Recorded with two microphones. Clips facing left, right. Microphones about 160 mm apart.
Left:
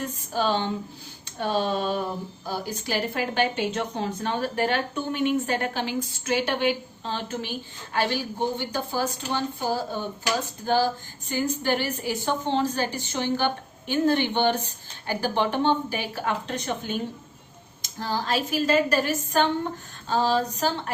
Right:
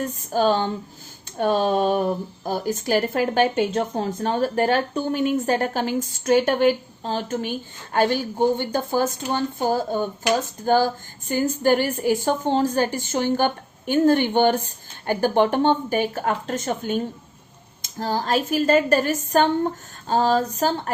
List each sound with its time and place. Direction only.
0.0 s a woman's voice: 45° right (ahead or behind)